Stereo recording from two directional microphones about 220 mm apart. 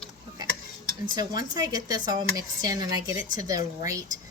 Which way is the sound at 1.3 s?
20° right (ahead or behind).